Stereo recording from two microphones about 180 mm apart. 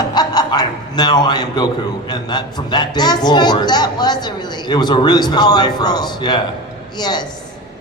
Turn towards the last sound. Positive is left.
turn(degrees=25)  # may be behind; listen again after turning